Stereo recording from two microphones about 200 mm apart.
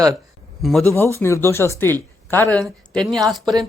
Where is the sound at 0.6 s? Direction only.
Centre (ahead or behind).